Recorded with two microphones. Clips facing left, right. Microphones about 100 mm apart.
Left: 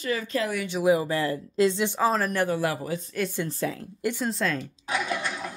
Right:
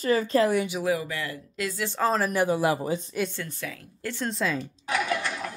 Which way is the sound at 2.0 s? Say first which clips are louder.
Right 5 dB; centre (ahead or behind).